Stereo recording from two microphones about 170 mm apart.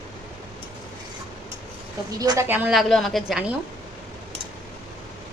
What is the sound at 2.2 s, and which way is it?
Speech, 20° right (ahead or behind).